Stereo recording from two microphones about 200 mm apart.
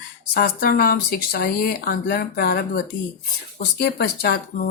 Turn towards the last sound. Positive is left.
turn(degrees=50)  # may be behind; listen again after turning